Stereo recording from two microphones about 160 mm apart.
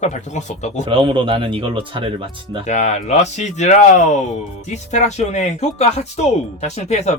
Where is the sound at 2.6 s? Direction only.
45° left (ahead or behind).